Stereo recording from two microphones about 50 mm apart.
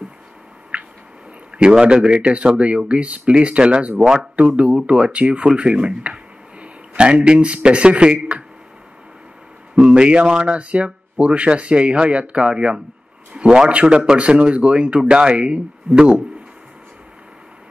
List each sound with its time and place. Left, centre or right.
1.6 s speech: centre
4.0 s speech: centre
4.4 s speech: right
9.8 s speech: centre